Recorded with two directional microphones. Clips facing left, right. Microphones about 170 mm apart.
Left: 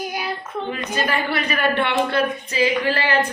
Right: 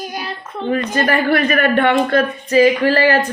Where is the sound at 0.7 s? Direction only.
55° right (ahead or behind).